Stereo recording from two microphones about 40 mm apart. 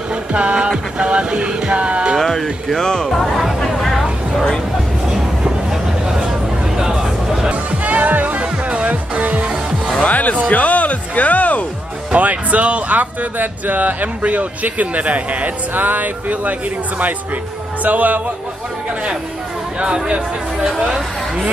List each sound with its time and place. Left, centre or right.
0.1 s music: right
2.1 s speech: centre
3.1 s music: centre
5.1 s a sound: centre
7.5 s music: right
10.0 s music: left
12.1 s speech: right
17.8 s speech: right